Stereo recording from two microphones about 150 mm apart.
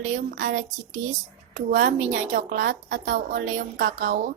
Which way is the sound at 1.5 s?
55° right (ahead or behind).